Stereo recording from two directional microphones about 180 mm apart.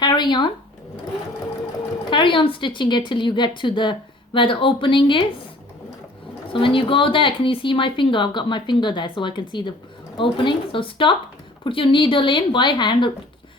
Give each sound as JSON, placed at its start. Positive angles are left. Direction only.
{"t": 0.0, "sound": "a sound", "side_deg": 25}
{"t": 2.0, "sound": "speech", "side_deg": 25}
{"t": 6.5, "sound": "speech", "side_deg": 30}